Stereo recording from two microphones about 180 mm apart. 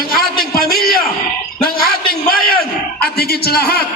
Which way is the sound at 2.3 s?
55° left (ahead or behind).